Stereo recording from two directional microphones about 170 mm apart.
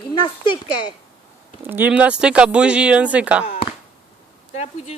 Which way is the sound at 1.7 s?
10° right (ahead or behind).